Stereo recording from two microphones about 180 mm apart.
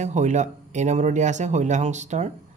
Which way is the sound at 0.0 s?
40° right (ahead or behind).